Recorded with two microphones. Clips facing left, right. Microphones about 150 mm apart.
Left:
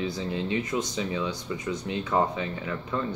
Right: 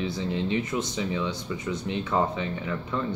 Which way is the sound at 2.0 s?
20° left (ahead or behind).